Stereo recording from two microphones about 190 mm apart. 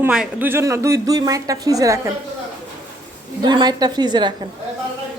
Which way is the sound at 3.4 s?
20° right (ahead or behind).